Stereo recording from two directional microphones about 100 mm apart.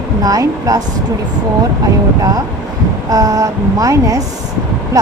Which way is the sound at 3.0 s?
35° right (ahead or behind).